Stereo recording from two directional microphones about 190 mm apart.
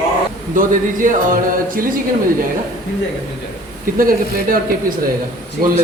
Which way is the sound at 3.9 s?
45° right (ahead or behind).